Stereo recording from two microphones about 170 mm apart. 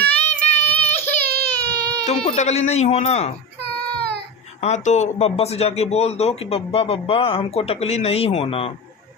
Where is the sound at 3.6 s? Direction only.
70° right (ahead or behind).